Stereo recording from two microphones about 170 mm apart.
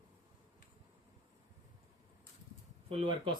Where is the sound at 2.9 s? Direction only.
30° right (ahead or behind).